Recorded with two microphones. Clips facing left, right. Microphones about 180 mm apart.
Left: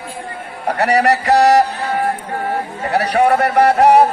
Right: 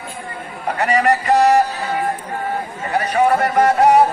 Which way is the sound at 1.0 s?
75° left (ahead or behind).